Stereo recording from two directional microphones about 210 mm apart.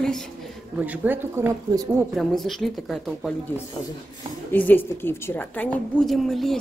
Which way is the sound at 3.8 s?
20° left (ahead or behind).